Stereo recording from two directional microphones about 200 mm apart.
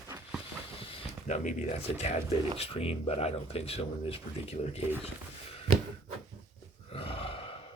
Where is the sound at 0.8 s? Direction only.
30° left (ahead or behind).